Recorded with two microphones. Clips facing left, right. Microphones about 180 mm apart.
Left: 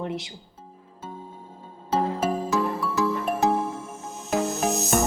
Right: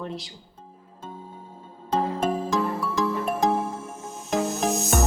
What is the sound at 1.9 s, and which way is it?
Music, 5° left (ahead or behind).